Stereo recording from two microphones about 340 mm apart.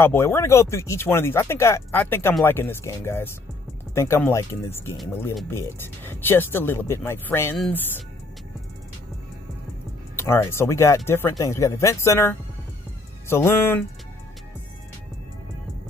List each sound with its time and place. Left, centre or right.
0.0 s speech: centre
10.1 s speech: centre